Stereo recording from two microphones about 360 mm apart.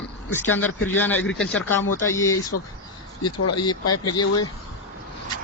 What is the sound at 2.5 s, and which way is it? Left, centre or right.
Speech, left.